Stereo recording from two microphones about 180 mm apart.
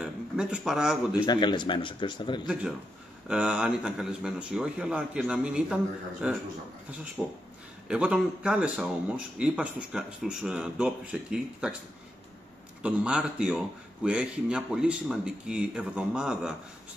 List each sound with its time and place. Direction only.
0.0 s a sound: 5° right (ahead or behind)
1.1 s a man's voice: 25° left (ahead or behind)
2.4 s speech: 5° right (ahead or behind)
12.8 s speech: 5° right (ahead or behind)